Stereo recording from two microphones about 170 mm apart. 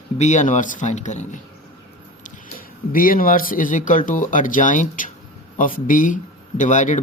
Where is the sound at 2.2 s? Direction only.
55° left (ahead or behind).